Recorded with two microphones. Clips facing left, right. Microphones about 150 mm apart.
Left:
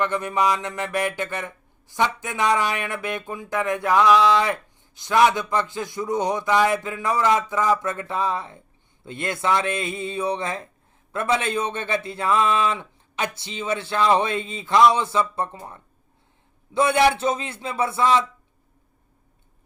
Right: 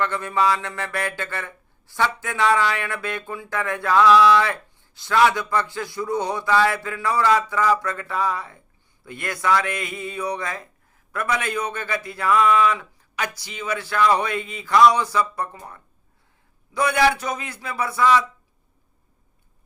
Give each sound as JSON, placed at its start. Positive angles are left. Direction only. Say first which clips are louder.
{"t": 0.0, "sound": "a man's voice", "louder": "even", "side_deg": 20}